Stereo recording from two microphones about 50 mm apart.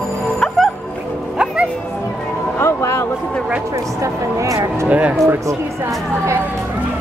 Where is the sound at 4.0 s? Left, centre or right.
Right.